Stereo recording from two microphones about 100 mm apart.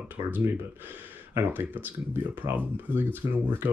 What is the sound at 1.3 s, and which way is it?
Speech, 20° right (ahead or behind).